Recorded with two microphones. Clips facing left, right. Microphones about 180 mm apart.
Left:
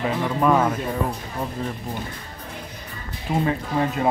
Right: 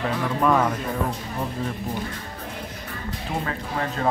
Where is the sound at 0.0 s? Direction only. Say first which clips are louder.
Left 2 dB; 5° left (ahead or behind).